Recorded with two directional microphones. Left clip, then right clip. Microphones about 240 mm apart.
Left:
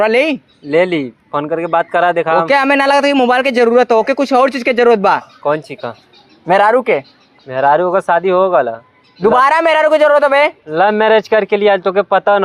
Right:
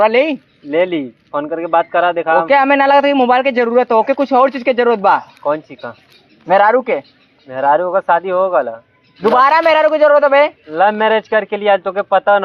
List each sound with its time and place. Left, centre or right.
0.0 s a man's voice: left